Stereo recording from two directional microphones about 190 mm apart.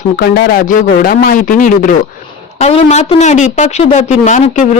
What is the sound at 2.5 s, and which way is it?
Speech, 35° left (ahead or behind).